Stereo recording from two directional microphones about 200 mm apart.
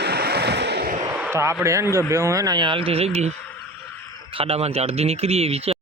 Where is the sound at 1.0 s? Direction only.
15° right (ahead or behind).